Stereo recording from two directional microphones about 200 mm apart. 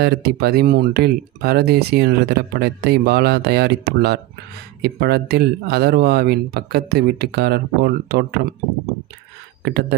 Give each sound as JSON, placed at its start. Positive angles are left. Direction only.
{"t": 0.0, "sound": "speech", "side_deg": -55}
{"t": 9.7, "sound": "speech", "side_deg": -55}